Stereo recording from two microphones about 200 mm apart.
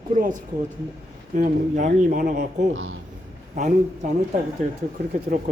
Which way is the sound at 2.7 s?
85° right.